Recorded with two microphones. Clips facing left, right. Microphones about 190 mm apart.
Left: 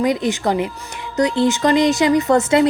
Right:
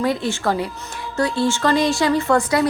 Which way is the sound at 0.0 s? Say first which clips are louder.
Left 3 dB; 15° left (ahead or behind).